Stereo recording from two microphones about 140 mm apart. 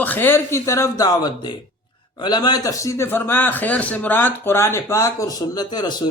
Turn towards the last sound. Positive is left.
turn(degrees=30)  # may be behind; listen again after turning